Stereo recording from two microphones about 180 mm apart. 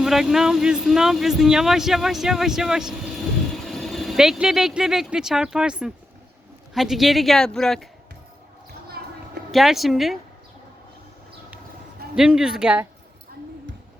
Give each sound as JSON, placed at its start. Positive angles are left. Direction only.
{"t": 0.0, "sound": "speech", "side_deg": 0}
{"t": 9.0, "sound": "a sound", "side_deg": -65}
{"t": 9.5, "sound": "speech", "side_deg": 0}
{"t": 12.1, "sound": "speech", "side_deg": -5}